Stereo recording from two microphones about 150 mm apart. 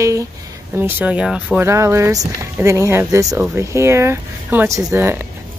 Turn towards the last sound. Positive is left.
turn(degrees=-15)  # may be behind; listen again after turning